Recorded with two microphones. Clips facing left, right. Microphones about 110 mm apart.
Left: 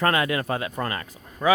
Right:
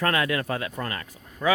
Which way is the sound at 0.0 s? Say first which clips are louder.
Left 2 dB; 20° left (ahead or behind).